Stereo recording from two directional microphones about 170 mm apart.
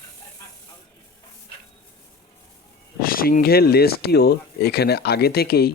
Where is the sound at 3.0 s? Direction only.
60° left (ahead or behind).